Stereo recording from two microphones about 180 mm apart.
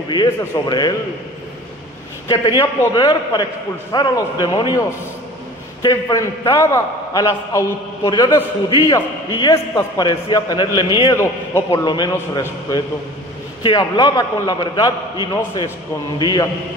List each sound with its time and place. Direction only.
0.1 s a man's voice: 25° left (ahead or behind)
2.2 s a man's voice: 25° left (ahead or behind)